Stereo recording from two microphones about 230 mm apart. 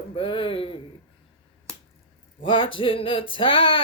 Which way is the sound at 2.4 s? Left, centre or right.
Left.